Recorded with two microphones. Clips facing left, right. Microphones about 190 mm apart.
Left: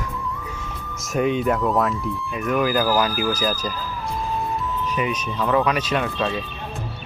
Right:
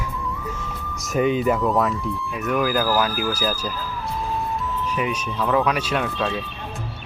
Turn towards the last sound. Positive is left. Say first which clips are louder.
# left 1 dB
turn(degrees=0)  # may be behind; listen again after turning